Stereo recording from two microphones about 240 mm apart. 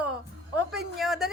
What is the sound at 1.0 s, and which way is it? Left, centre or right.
Speech, centre.